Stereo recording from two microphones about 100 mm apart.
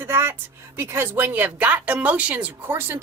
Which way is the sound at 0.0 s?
25° right (ahead or behind).